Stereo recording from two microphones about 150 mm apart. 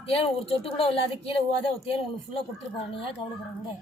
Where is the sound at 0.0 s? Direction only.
40° left (ahead or behind).